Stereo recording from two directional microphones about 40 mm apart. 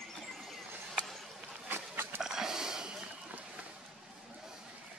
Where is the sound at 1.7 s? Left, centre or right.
Right.